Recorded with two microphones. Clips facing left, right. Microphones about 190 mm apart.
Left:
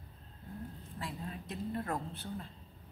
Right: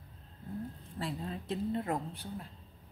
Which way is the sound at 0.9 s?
30° right (ahead or behind).